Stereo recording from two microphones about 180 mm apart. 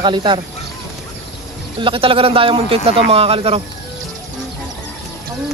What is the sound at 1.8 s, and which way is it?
Speech, 30° right (ahead or behind).